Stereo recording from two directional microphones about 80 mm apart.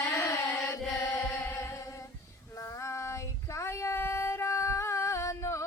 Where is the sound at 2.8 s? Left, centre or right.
Left.